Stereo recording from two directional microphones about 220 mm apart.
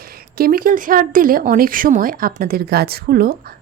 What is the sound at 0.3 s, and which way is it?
Speech, 40° right (ahead or behind).